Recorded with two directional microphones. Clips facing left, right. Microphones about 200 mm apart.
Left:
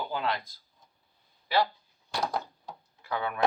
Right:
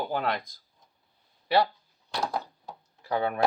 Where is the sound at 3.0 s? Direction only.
40° right (ahead or behind).